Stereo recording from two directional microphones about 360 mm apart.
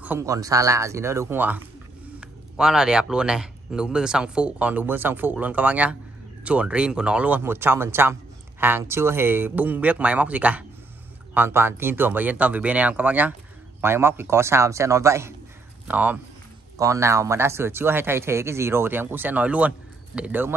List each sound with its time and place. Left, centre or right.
0.0 s speech: centre